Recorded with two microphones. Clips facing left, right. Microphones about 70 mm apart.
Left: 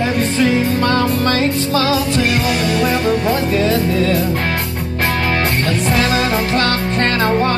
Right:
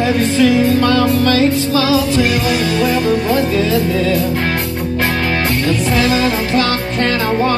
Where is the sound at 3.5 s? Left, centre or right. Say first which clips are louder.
Right 1 dB; left.